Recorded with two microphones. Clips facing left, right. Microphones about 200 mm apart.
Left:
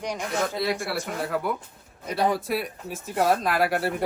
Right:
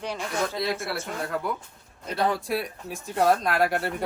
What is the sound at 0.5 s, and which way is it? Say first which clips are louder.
Speech: left 2 dB; centre (ahead or behind).